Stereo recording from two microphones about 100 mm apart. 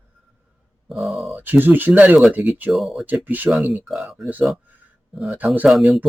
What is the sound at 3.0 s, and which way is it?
Speech, 20° right (ahead or behind).